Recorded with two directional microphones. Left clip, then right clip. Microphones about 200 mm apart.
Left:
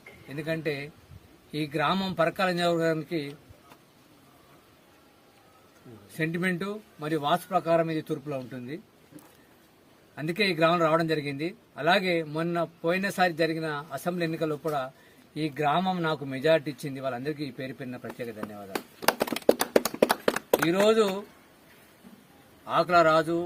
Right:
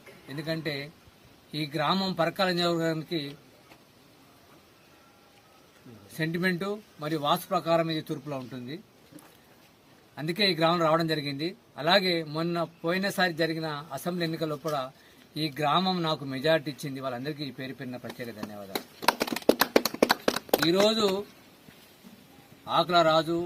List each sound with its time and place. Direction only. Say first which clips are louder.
0.3 s a man's voice: left 2 dB; centre (ahead or behind)
6.1 s a man's voice: even; centre (ahead or behind)
10.2 s a man's voice: left 1 dB; centre (ahead or behind)
20.1 s a sound: left 1 dB; 35° left (ahead or behind)
20.7 s a man's voice: left 1 dB; centre (ahead or behind)
22.7 s speech: left 1 dB; 5° left (ahead or behind)